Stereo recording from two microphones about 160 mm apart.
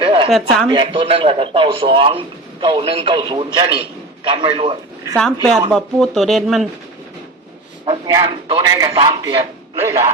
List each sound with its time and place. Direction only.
0.0 s a sound: 30° right (ahead or behind)
0.3 s speech: centre (ahead or behind)
0.7 s a man's voice: 30° right (ahead or behind)
5.1 s speech: 5° left (ahead or behind)
7.9 s a man's voice: 30° right (ahead or behind)